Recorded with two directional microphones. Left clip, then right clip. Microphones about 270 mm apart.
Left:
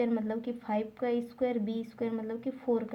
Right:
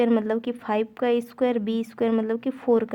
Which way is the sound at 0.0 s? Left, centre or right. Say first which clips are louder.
Right 9 dB; right.